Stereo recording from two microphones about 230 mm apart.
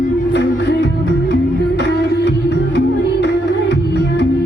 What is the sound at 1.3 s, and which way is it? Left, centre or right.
Music, left.